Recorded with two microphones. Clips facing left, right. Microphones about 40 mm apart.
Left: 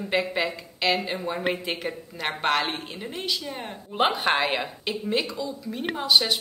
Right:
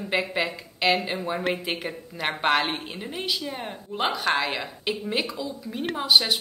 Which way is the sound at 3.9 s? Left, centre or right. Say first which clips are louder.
Left 2 dB; left.